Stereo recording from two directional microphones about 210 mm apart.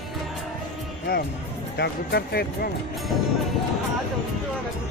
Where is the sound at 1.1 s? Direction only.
45° left (ahead or behind).